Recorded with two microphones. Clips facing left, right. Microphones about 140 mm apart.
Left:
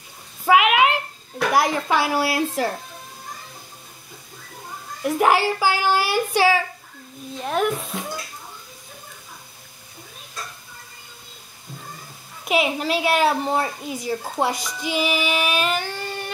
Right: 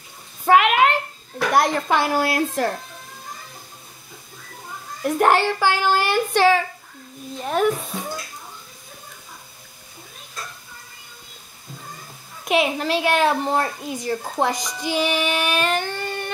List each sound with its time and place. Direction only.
0.5 s a sound: 5° left (ahead or behind)
1.5 s a child's voice: 5° left (ahead or behind)
5.0 s a child's voice: 5° left (ahead or behind)
7.3 s a child's voice: centre (ahead or behind)
12.4 s a child's voice: 5° left (ahead or behind)